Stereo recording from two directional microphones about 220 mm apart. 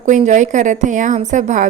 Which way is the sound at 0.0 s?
35° right (ahead or behind).